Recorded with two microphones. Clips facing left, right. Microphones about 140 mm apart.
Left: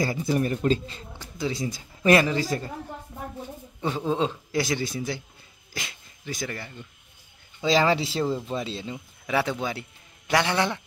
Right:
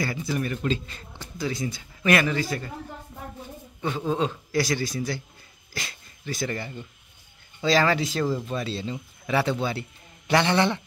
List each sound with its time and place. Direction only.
0.1 s speech: 35° left (ahead or behind)
4.0 s speech: 20° left (ahead or behind)
5.7 s a sound: 15° left (ahead or behind)
7.6 s a man's voice: 20° left (ahead or behind); by 10.8 s 5° left (ahead or behind)